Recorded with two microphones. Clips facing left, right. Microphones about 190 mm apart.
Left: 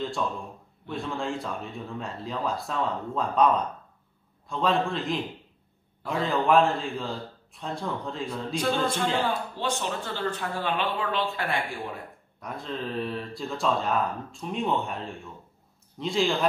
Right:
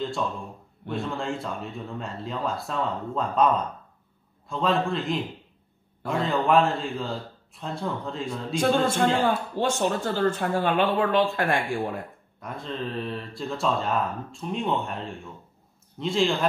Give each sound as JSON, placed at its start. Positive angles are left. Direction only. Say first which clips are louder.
{"t": 0.8, "sound": "speech", "louder": "right 2 dB", "side_deg": 0}
{"t": 9.2, "sound": "speech", "louder": "right 4 dB", "side_deg": -45}
{"t": 12.4, "sound": "speech", "louder": "right 1 dB", "side_deg": 0}